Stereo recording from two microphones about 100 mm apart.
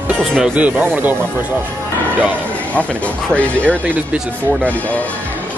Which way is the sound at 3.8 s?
15° right (ahead or behind).